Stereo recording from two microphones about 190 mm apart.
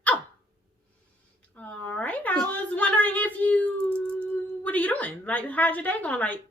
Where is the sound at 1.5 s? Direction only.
10° left (ahead or behind).